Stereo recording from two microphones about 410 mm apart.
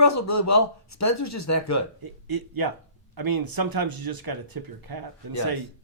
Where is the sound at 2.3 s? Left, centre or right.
Right.